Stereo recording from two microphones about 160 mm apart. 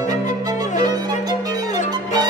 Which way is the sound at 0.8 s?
25° right (ahead or behind).